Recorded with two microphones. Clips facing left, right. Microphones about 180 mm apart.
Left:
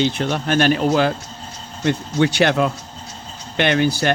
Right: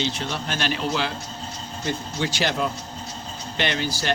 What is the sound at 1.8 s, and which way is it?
A man's voice, 60° left (ahead or behind).